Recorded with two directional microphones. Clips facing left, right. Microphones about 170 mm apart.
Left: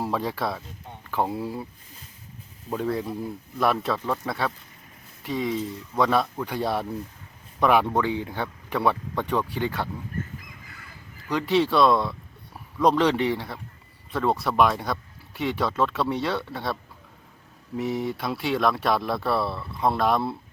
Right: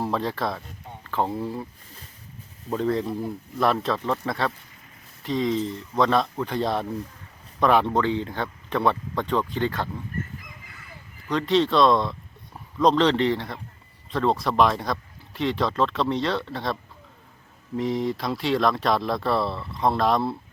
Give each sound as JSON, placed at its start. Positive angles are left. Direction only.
{"t": 0.0, "sound": "speech", "side_deg": 5}
{"t": 2.7, "sound": "speech", "side_deg": 5}
{"t": 11.3, "sound": "speech", "side_deg": 10}
{"t": 17.7, "sound": "speech", "side_deg": 5}